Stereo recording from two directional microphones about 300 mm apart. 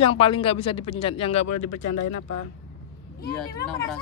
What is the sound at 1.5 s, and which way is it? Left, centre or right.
Speech, left.